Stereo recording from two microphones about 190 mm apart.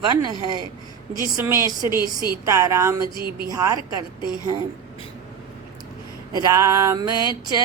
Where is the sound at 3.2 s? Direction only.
55° right (ahead or behind).